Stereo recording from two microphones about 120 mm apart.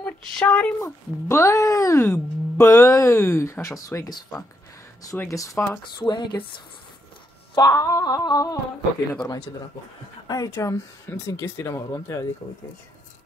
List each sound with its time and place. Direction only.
0.0 s speech: 10° left (ahead or behind)
0.8 s speech: 25° left (ahead or behind)
5.9 s speech: 40° left (ahead or behind)
7.5 s speech: 30° left (ahead or behind)
10.2 s a sound: 30° left (ahead or behind)
10.5 s speech: 25° left (ahead or behind)